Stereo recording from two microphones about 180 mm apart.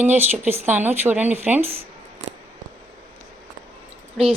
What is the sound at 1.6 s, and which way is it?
Speech, 35° right (ahead or behind).